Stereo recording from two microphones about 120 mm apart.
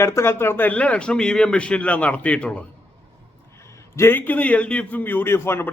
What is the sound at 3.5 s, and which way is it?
A man's voice, 25° left (ahead or behind).